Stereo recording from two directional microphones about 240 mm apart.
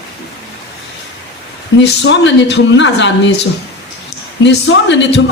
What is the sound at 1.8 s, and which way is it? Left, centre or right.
A man's voice, left.